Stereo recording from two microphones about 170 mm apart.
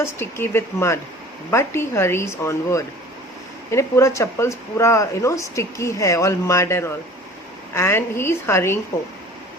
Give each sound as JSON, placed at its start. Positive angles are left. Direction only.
{"t": 0.0, "sound": "speech", "side_deg": 15}